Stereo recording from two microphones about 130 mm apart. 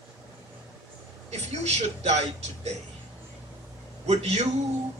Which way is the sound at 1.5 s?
60° right (ahead or behind).